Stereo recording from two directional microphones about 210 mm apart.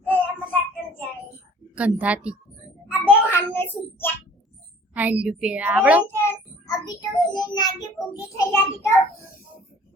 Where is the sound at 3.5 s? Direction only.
10° left (ahead or behind).